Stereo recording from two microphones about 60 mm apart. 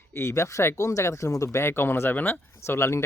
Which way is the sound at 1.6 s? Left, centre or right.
Left.